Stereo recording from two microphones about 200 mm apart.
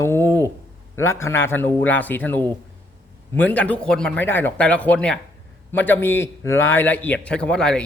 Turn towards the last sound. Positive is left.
turn(degrees=5)  # may be behind; listen again after turning